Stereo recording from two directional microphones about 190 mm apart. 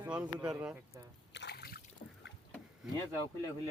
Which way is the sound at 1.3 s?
65° left (ahead or behind).